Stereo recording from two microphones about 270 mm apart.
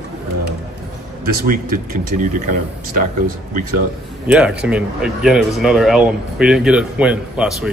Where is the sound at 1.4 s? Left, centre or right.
Right.